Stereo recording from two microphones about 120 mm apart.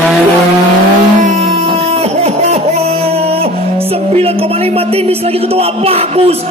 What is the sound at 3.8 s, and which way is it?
Speech, 55° right (ahead or behind).